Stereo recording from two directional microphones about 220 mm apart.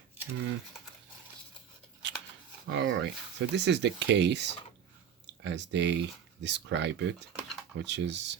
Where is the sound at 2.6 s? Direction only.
55° right (ahead or behind).